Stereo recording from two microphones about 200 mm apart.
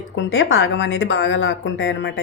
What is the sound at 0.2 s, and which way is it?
Speech, 70° left (ahead or behind).